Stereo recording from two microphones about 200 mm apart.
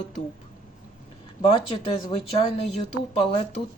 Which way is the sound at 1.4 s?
30° left (ahead or behind).